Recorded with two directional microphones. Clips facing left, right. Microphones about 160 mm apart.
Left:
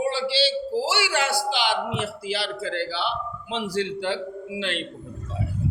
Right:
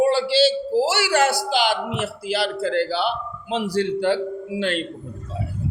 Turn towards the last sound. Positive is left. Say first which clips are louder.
# right 5 dB
turn(degrees=-45)  # may be behind; listen again after turning